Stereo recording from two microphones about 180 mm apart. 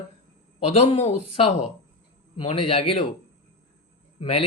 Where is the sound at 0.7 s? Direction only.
35° left (ahead or behind).